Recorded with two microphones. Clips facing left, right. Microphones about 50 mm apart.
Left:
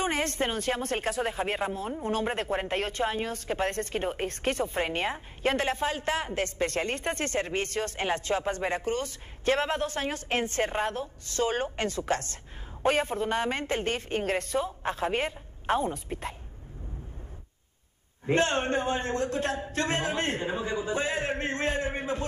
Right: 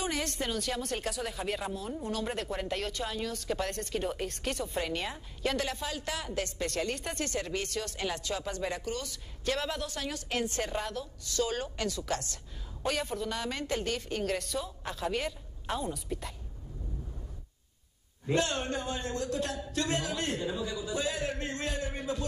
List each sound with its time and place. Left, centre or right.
0.0 s speech: left
18.2 s speech: left